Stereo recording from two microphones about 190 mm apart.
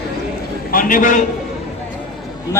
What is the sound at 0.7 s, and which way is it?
Speech, 45° left (ahead or behind).